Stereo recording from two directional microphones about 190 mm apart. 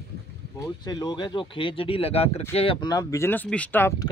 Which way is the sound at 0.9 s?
20° left (ahead or behind).